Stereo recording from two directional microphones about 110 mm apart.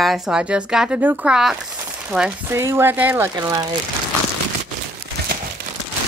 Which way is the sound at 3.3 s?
35° right (ahead or behind).